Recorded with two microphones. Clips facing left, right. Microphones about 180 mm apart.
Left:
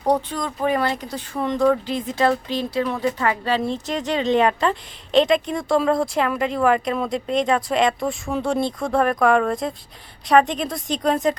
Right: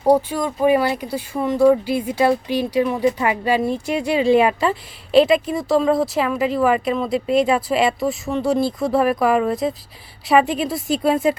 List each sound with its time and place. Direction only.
0.0 s speech: 10° right (ahead or behind)